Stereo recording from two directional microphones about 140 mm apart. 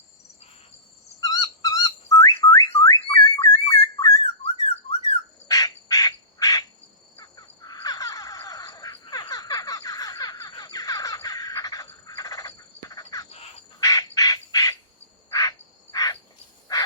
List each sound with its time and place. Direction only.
1.2 s whistle: 25° left (ahead or behind)
4.6 s whistling: 45° left (ahead or behind)
5.5 s bird: 25° left (ahead or behind)
7.2 s crow: 25° left (ahead or behind)
9.3 s a sound: 25° left (ahead or behind)
13.7 s squawk: 25° left (ahead or behind)
15.3 s bird: 25° left (ahead or behind)